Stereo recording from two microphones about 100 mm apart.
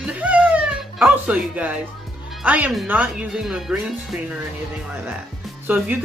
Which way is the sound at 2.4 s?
15° right (ahead or behind).